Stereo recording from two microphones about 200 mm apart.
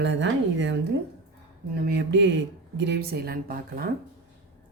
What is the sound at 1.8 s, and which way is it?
A woman's voice, 60° right (ahead or behind).